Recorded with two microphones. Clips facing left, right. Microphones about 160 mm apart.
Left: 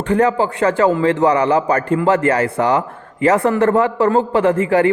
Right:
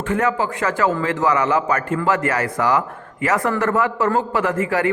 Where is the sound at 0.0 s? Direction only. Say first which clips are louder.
Left 5 dB; 35° left (ahead or behind).